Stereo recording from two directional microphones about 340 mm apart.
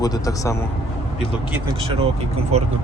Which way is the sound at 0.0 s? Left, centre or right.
Centre.